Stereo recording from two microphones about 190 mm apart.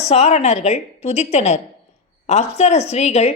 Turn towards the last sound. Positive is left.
turn(degrees=35)  # may be behind; listen again after turning